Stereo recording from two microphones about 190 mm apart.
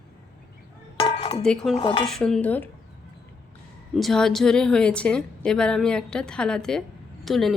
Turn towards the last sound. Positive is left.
turn(degrees=0)  # may be behind; listen again after turning